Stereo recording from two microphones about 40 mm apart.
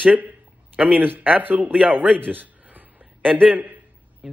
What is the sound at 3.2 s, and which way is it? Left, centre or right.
Speech, centre.